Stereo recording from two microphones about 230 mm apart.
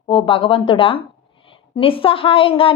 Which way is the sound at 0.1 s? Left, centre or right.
Left.